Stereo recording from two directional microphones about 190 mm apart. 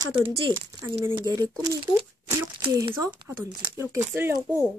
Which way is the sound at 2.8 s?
25° right (ahead or behind).